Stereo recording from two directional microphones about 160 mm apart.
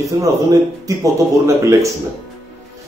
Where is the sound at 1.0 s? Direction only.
20° right (ahead or behind).